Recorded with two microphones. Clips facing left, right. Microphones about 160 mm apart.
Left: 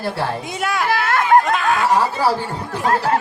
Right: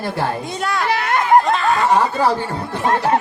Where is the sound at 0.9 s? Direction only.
20° right (ahead or behind).